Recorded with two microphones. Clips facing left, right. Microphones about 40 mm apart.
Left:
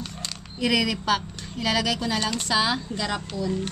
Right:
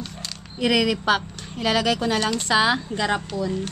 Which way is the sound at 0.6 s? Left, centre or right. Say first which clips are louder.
Right 3 dB; right.